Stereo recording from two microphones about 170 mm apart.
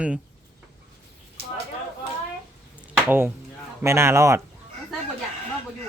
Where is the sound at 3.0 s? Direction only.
10° right (ahead or behind).